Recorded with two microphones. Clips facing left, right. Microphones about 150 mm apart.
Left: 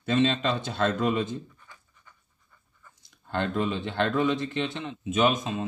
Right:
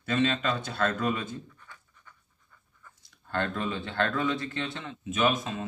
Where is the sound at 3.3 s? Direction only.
20° left (ahead or behind).